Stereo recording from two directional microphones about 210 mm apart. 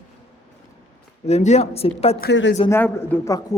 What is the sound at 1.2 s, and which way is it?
Speech, 30° left (ahead or behind).